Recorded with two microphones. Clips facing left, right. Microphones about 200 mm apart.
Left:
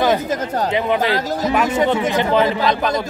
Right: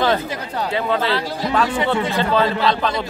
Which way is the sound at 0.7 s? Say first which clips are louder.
Left 1 dB; 20° left (ahead or behind).